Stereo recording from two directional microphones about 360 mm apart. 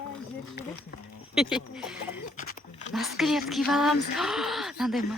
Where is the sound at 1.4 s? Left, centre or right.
Centre.